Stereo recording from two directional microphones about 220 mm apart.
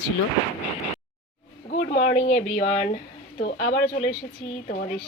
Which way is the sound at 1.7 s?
40° left (ahead or behind).